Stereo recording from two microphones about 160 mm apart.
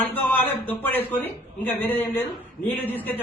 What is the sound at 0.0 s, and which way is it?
A man's voice, 10° left (ahead or behind).